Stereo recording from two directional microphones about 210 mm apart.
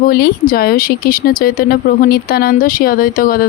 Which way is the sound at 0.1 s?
45° left (ahead or behind).